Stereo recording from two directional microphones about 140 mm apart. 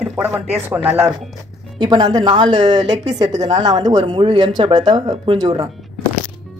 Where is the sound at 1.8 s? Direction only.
30° right (ahead or behind).